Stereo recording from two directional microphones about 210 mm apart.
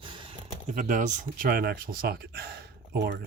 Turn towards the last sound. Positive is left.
turn(degrees=-50)  # may be behind; listen again after turning